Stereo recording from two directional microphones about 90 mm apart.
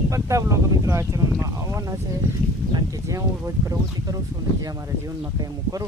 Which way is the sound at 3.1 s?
35° right (ahead or behind).